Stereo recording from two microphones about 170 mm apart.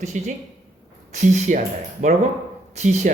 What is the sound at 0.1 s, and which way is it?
Speech, 45° right (ahead or behind).